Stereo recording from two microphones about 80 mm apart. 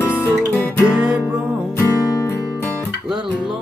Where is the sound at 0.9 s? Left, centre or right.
Centre.